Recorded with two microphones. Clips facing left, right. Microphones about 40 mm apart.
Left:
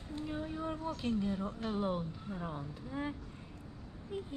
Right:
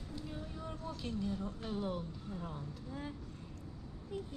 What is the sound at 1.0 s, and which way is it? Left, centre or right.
Speech, left.